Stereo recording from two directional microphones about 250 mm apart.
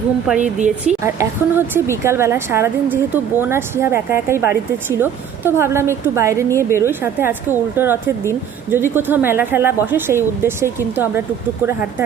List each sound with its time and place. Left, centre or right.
0.4 s speech: right
1.0 s speech: centre